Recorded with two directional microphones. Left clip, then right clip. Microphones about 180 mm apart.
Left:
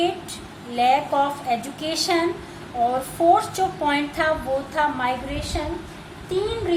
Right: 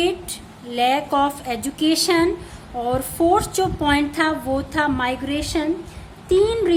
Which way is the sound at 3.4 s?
50° right (ahead or behind).